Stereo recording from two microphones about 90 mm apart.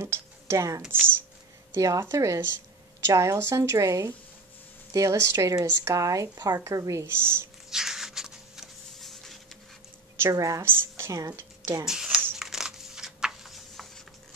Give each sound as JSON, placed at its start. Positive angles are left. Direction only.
{"t": 0.0, "sound": "speech", "side_deg": -30}
{"t": 6.6, "sound": "speech", "side_deg": -35}
{"t": 7.7, "sound": "a sound", "side_deg": -5}
{"t": 10.1, "sound": "a woman's voice", "side_deg": -35}
{"t": 10.6, "sound": "speech", "side_deg": -25}
{"t": 11.8, "sound": "shuffling cards", "side_deg": -5}